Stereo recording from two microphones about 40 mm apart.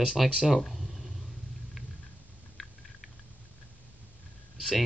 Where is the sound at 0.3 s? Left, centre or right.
Centre.